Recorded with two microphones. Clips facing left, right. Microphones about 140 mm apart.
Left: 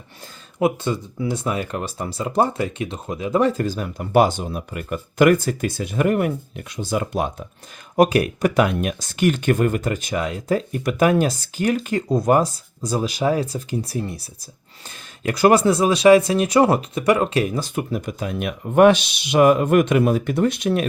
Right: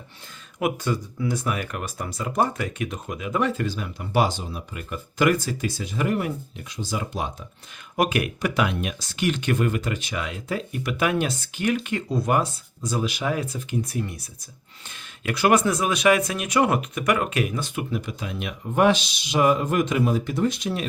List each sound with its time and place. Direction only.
0.6 s speech: 25° left (ahead or behind); by 7.4 s 55° left (ahead or behind)
7.9 s speech: 40° left (ahead or behind); by 20.8 s 60° left (ahead or behind)